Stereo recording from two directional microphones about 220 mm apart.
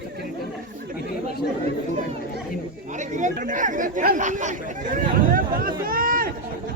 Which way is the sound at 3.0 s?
35° right (ahead or behind).